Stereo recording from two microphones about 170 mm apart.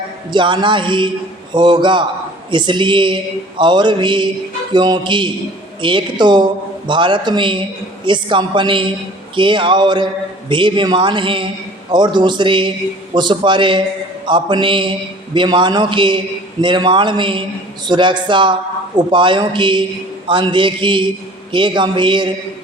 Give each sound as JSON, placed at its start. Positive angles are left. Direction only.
{"t": 0.3, "sound": "a man's voice", "side_deg": -30}